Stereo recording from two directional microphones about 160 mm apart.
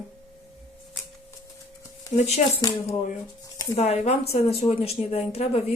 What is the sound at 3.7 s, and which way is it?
Speech, 40° left (ahead or behind).